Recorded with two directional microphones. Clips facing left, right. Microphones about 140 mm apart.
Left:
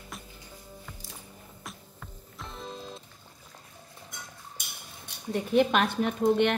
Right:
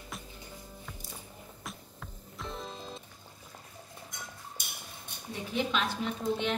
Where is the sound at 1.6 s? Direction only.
Centre (ahead or behind).